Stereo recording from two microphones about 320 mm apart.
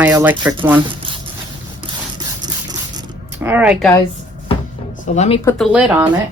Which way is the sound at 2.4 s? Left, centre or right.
Centre.